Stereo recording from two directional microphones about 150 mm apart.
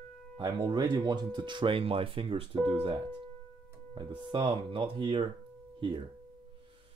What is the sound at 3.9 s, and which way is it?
Speech, 30° right (ahead or behind).